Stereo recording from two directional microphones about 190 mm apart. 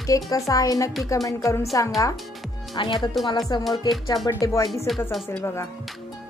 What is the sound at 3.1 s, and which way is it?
Speech, centre (ahead or behind).